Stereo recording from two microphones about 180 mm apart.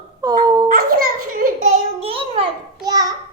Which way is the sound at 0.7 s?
55° right (ahead or behind).